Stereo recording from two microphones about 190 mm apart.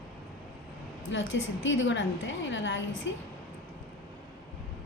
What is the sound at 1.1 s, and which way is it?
A woman's voice, 85° left.